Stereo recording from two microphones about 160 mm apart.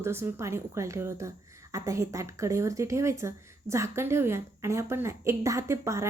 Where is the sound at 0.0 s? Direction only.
15° right (ahead or behind).